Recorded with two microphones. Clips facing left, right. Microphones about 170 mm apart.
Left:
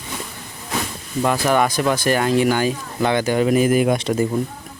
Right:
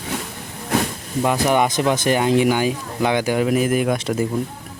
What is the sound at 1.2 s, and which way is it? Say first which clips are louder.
Speech: even; 15° right (ahead or behind).